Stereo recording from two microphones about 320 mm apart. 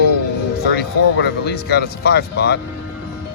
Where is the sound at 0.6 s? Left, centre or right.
Left.